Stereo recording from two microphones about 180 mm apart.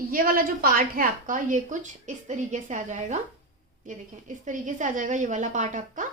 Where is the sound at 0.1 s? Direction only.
55° right (ahead or behind).